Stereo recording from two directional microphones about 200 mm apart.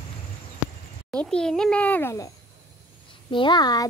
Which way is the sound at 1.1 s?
5° left (ahead or behind).